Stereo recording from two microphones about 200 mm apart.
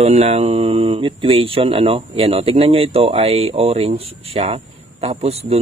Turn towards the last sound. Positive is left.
turn(degrees=-30)  # may be behind; listen again after turning